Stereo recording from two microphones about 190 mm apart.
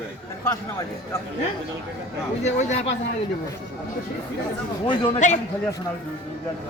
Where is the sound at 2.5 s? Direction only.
35° left (ahead or behind).